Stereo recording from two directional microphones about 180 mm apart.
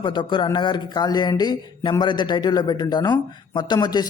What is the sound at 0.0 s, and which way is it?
A man's voice, 25° left (ahead or behind).